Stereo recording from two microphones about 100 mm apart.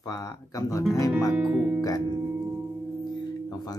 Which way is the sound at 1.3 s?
10° right (ahead or behind).